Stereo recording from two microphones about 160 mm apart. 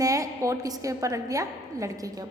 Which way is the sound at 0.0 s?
20° right (ahead or behind).